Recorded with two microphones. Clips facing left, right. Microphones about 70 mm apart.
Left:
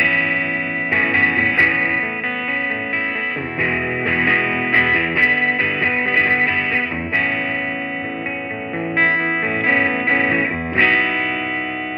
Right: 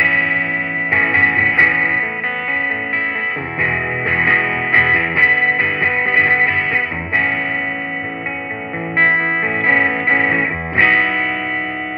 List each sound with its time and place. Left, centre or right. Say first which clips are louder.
0.9 s music: right 3 dB; right
4.2 s music: right 3 dB; right
8.9 s music: right 3 dB; right